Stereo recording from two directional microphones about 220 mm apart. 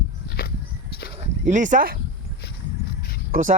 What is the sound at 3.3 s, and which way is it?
Speech, 35° right (ahead or behind).